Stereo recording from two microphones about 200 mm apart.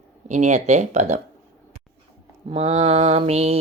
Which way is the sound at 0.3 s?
35° right (ahead or behind).